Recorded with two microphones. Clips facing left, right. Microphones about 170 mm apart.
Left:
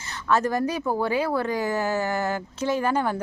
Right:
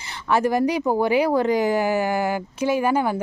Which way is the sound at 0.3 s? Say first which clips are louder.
Right 3 dB; 10° right (ahead or behind).